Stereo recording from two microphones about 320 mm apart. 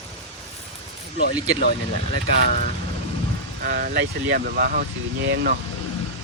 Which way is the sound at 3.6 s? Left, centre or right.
Right.